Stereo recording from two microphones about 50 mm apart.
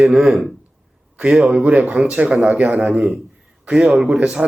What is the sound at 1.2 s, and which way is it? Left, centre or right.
A man's voice, centre.